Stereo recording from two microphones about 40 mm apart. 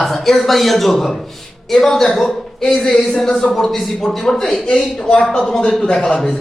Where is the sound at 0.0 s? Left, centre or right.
Centre.